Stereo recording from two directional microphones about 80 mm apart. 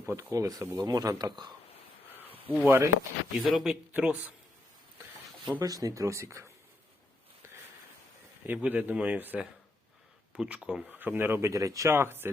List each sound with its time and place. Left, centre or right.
0.2 s speech: right
0.6 s speech: right
0.9 s speech: right
2.1 s a sound: right
2.6 s speech: right
3.3 s speech: centre
3.9 s speech: centre
5.5 s speech: right
7.4 s a sound: right
8.5 s speech: centre
10.3 s speech: centre
10.8 s speech: right
11.5 s speech: right
11.9 s speech: right